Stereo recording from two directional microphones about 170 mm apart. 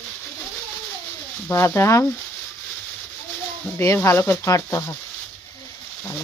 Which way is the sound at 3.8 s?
15° left (ahead or behind).